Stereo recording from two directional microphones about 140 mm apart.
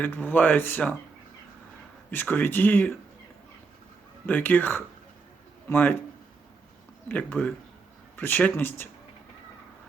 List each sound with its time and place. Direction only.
0.0 s speech: 15° left (ahead or behind)
2.0 s speech: 10° left (ahead or behind)
4.3 s speech: 15° left (ahead or behind)
7.1 s speech: 10° left (ahead or behind)